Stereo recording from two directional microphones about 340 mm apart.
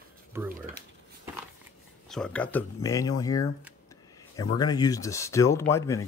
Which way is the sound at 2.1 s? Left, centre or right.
Centre.